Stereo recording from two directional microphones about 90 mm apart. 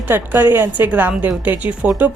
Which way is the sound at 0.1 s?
20° right (ahead or behind).